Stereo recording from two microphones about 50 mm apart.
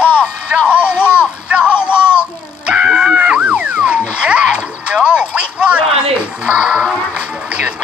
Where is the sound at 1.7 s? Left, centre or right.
Left.